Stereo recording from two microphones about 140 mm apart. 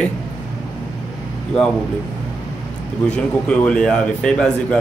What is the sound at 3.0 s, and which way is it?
A man's voice, 5° left (ahead or behind).